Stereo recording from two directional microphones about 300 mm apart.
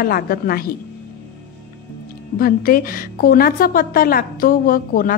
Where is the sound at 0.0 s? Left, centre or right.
Left.